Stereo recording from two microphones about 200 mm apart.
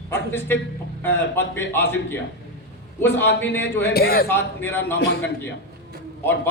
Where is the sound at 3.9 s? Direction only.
50° left (ahead or behind).